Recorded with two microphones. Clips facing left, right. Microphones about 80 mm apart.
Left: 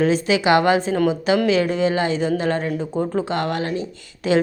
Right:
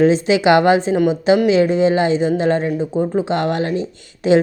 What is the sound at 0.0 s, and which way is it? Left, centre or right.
A woman's voice, right.